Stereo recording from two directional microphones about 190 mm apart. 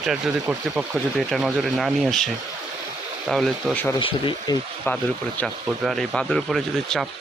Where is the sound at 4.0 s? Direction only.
25° left (ahead or behind).